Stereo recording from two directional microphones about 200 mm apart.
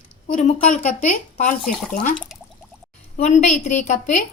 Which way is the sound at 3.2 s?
35° left (ahead or behind).